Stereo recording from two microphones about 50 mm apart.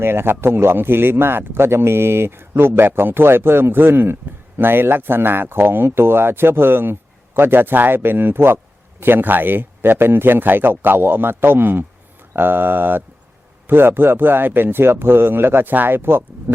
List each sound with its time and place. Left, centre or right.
0.0 s speech: right